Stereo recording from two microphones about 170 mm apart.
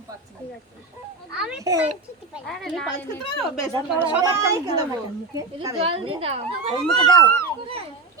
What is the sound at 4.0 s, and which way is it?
Speech, 15° right (ahead or behind).